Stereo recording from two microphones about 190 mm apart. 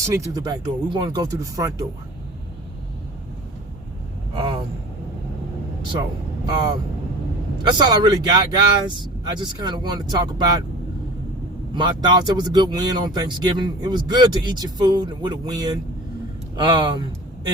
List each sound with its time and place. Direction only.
0.0 s speech: 15° right (ahead or behind)
4.4 s vehicle: 25° right (ahead or behind)
6.4 s speech: 20° right (ahead or behind)
11.7 s speech: 25° right (ahead or behind)